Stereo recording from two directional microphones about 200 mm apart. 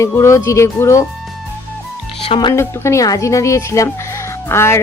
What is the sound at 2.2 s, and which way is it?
Speech, 25° left (ahead or behind).